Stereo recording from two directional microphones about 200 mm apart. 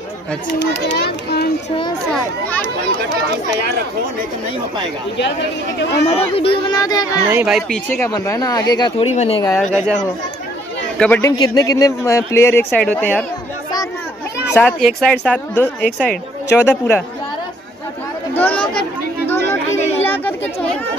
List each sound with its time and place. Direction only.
0.9 s a child's voice: 50° left (ahead or behind)
2.0 s speech: 5° left (ahead or behind)
6.0 s speech: 30° left (ahead or behind)
7.2 s a woman's voice: 5° right (ahead or behind)
7.9 s speech: 15° left (ahead or behind); by 9.4 s 30° left (ahead or behind)
9.6 s a woman's voice: 5° left (ahead or behind)
11.0 s speech: 10° left (ahead or behind)
14.5 s a woman's voice: 5° left (ahead or behind)
18.3 s chatter: 5° left (ahead or behind)